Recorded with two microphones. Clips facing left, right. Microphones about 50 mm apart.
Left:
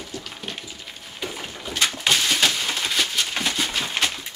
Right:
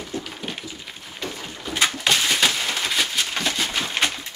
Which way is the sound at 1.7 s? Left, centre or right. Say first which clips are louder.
Right 1 dB; centre.